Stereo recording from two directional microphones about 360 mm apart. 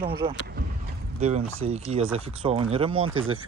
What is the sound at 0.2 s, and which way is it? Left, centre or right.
Speech, centre.